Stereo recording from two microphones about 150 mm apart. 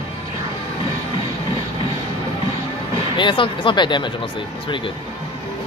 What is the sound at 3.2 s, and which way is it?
Speech, 35° left (ahead or behind).